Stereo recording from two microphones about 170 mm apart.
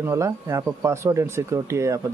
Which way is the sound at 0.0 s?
15° right (ahead or behind).